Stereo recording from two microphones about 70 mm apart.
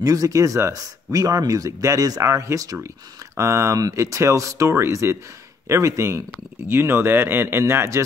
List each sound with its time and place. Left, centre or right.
0.0 s speech: right
6.7 s speech: right